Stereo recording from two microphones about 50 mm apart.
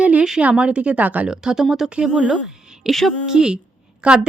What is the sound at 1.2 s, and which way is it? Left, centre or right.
A woman's voice, centre.